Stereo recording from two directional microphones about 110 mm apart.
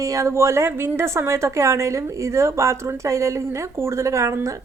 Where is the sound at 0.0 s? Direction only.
30° right (ahead or behind).